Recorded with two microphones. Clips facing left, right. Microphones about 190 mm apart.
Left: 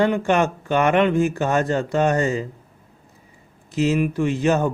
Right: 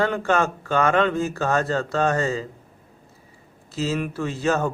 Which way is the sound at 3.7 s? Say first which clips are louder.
Left 6 dB; 15° left (ahead or behind).